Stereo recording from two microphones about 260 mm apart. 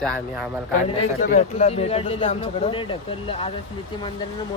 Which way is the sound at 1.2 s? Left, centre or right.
Left.